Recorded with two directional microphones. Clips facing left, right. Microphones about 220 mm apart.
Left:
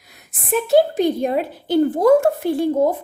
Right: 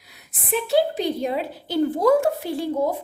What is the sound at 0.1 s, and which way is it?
A woman's voice, 45° left (ahead or behind).